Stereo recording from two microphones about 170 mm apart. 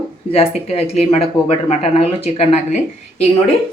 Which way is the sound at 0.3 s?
40° left (ahead or behind).